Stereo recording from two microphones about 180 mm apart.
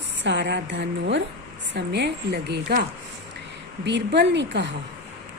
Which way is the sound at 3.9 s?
75° right (ahead or behind).